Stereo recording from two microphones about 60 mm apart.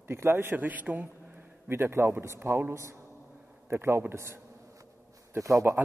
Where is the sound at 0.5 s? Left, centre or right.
Right.